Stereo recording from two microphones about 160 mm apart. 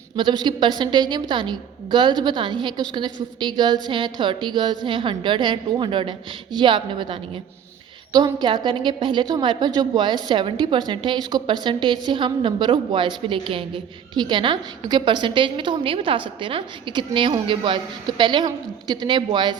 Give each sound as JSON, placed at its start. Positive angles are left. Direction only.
{"t": 0.2, "sound": "a woman's voice", "side_deg": -30}